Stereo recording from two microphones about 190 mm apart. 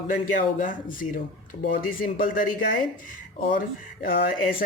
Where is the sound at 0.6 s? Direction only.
45° left (ahead or behind).